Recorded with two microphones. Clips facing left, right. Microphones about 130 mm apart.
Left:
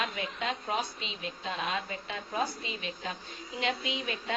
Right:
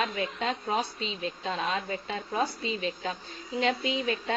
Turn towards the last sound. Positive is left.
turn(degrees=-35)  # may be behind; listen again after turning